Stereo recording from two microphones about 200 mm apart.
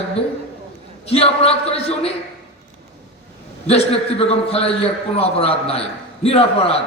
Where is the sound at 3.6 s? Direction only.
30° left (ahead or behind).